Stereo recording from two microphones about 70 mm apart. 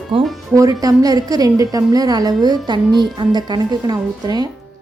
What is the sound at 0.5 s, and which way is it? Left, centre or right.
A woman's voice, right.